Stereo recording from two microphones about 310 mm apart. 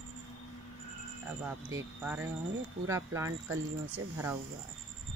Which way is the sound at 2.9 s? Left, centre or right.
Centre.